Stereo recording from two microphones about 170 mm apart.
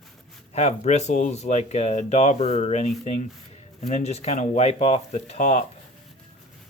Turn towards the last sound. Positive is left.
turn(degrees=45)  # may be behind; listen again after turning